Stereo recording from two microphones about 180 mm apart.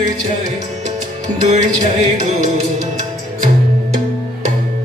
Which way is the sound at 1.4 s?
40° right (ahead or behind).